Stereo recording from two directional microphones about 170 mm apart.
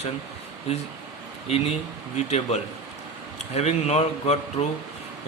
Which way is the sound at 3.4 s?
40° left (ahead or behind).